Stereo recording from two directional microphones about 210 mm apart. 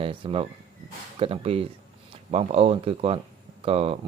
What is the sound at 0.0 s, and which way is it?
Speech, 25° right (ahead or behind).